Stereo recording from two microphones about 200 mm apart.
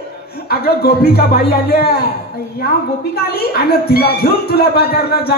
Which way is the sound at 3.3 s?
50° left (ahead or behind).